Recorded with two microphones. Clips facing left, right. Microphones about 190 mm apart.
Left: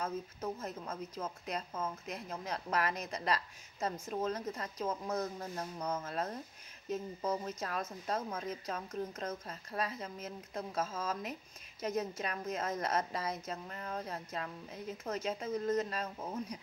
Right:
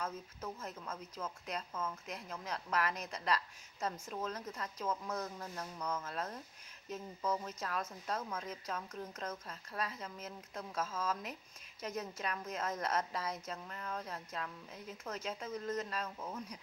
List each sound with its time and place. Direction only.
0.0 s speech: 35° left (ahead or behind)